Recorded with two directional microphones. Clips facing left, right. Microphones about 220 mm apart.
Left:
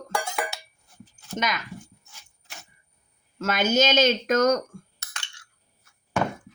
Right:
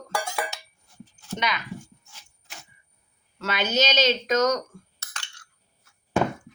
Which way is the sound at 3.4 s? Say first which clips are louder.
Left 3 dB; 45° left (ahead or behind).